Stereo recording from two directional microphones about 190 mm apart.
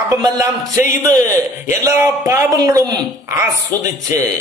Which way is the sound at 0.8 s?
40° left (ahead or behind).